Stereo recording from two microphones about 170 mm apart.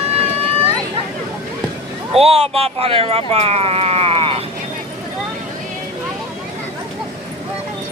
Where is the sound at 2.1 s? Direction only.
35° right (ahead or behind).